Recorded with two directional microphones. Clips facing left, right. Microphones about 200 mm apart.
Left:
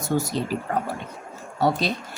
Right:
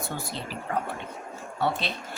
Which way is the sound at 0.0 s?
45° left (ahead or behind).